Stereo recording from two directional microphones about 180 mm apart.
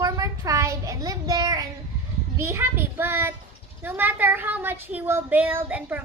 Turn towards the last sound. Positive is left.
turn(degrees=-10)  # may be behind; listen again after turning